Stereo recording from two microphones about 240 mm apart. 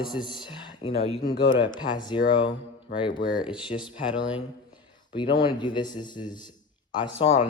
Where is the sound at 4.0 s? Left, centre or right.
Centre.